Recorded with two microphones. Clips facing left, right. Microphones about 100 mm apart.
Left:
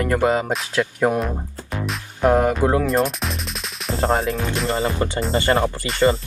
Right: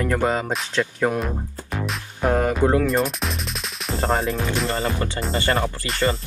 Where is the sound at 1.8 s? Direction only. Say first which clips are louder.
Left 3 dB; centre (ahead or behind).